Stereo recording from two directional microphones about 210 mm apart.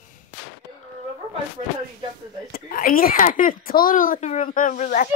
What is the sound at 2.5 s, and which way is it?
A child's voice, 45° left (ahead or behind).